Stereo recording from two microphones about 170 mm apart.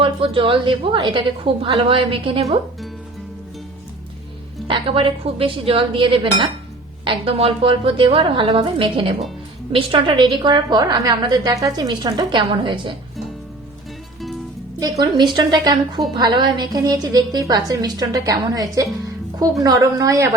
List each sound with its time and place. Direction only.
0.0 s a woman's voice: 30° right (ahead or behind)
4.7 s a woman's voice: 30° right (ahead or behind)
14.8 s a woman's voice: 20° right (ahead or behind)